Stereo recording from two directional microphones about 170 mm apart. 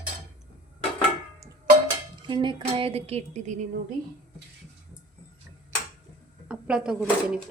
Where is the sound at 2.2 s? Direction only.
30° right (ahead or behind).